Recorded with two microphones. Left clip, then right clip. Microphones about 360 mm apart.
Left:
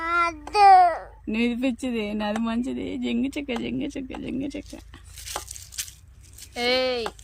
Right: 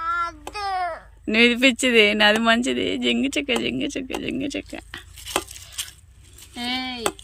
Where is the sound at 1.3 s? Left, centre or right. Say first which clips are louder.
Right 10 dB; centre.